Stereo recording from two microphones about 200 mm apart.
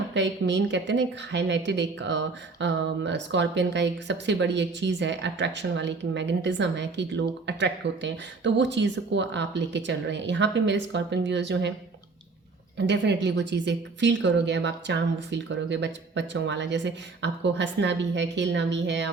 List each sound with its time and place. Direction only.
0.1 s a woman's voice: 60° right (ahead or behind)
12.7 s a woman's voice: 60° right (ahead or behind)